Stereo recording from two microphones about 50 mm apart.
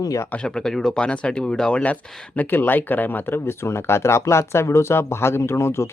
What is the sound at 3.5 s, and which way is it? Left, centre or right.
Speech, left.